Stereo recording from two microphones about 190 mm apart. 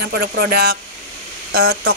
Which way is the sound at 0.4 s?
55° right (ahead or behind).